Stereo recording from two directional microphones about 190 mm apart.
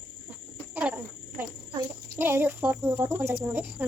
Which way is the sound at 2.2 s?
10° right (ahead or behind).